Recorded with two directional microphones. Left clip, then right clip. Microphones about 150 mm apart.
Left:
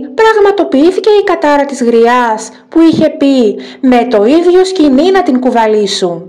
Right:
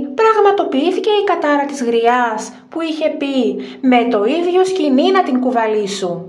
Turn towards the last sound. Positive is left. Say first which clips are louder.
# left 8 dB
turn(degrees=40)  # may be behind; listen again after turning